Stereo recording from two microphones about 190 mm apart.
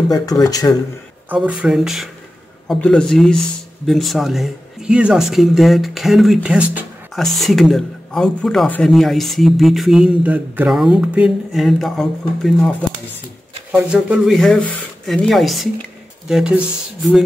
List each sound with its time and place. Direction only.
0.1 s speech: 20° left (ahead or behind)
1.3 s speech: 5° right (ahead or behind)